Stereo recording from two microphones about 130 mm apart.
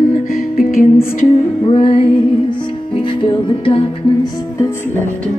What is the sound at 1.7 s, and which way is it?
Music, 45° left (ahead or behind).